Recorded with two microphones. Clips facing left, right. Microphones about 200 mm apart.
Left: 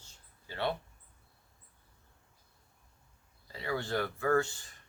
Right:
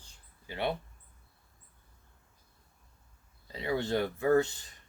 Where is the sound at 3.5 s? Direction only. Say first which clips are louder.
Right 4 dB; 20° right (ahead or behind).